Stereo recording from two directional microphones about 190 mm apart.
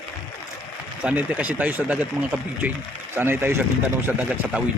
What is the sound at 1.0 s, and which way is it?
Speech, 10° right (ahead or behind).